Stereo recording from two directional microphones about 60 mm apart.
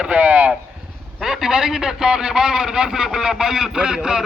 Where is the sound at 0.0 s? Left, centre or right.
Right.